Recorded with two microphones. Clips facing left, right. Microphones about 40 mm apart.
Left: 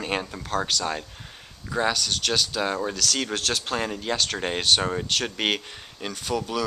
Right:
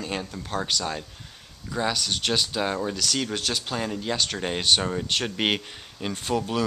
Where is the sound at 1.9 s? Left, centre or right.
Centre.